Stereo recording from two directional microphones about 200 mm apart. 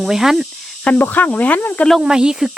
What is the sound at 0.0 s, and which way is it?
Speech, centre (ahead or behind).